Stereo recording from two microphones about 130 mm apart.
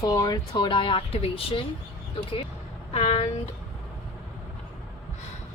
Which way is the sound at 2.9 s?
55° left (ahead or behind).